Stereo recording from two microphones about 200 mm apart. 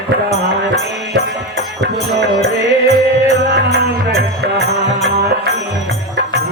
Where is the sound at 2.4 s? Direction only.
35° left (ahead or behind).